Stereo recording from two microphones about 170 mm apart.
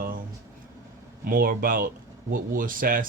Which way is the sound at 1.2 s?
55° right (ahead or behind).